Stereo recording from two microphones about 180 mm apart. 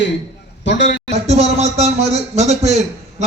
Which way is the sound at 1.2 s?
35° right (ahead or behind).